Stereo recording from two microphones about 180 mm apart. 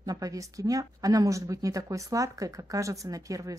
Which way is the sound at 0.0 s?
20° right (ahead or behind).